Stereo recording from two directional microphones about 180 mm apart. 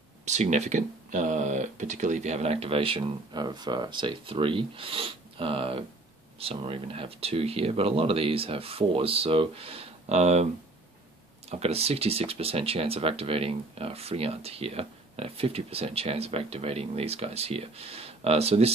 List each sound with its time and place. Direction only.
0.2 s speech: 40° right (ahead or behind)